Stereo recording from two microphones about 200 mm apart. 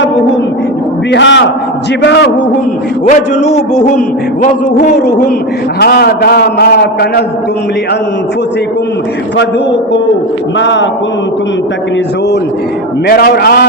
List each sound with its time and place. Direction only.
1.1 s a man's voice: 65° left (ahead or behind)
3.1 s a man's voice: 35° left (ahead or behind)
4.9 s a man's voice: 50° left (ahead or behind)
10.6 s a man's voice: 60° left (ahead or behind)
13.1 s a man's voice: 50° left (ahead or behind)